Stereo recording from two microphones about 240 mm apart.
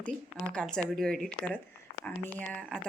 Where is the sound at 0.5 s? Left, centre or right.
Centre.